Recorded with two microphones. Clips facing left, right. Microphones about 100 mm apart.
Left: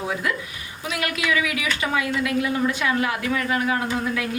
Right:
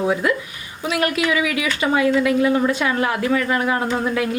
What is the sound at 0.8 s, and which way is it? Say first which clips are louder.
A woman's voice: right 7 dB; 35° right (ahead or behind).